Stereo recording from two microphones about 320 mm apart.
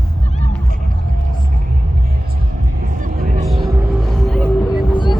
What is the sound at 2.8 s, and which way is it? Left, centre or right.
Music, right.